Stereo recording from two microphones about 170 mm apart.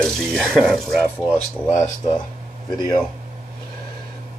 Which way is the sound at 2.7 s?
25° left (ahead or behind).